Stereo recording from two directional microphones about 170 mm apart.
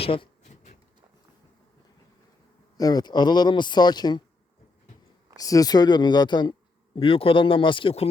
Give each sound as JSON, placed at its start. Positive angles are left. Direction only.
{"t": 0.0, "sound": "a sound", "side_deg": 30}
{"t": 2.7, "sound": "speech", "side_deg": 20}
{"t": 5.4, "sound": "speech", "side_deg": 20}